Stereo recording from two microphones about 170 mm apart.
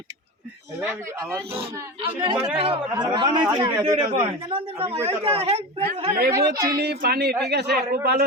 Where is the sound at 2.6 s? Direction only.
30° right (ahead or behind).